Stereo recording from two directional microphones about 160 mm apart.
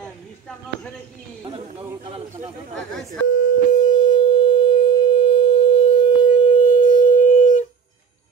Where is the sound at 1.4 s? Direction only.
35° right (ahead or behind).